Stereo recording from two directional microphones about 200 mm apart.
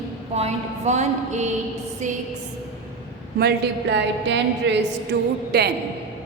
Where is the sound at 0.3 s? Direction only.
35° right (ahead or behind).